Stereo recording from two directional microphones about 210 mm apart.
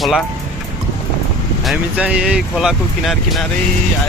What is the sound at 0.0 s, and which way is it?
Speech, centre (ahead or behind).